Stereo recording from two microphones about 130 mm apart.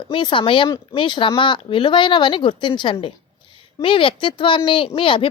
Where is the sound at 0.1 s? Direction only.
40° left (ahead or behind).